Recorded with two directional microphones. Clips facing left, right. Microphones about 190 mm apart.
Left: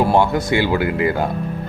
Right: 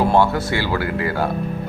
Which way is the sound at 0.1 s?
15° left (ahead or behind).